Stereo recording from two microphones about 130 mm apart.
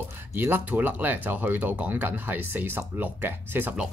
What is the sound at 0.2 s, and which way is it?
Speech, 15° right (ahead or behind).